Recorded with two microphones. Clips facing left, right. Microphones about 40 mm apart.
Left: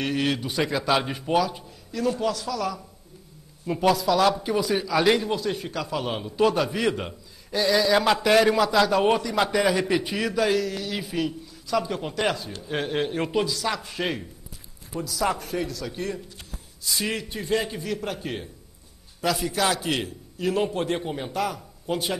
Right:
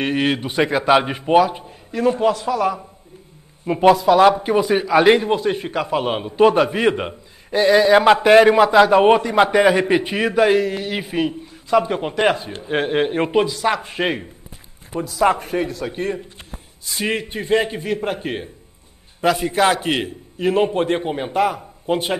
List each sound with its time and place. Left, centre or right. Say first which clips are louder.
0.0 s a man's voice: right 6 dB; right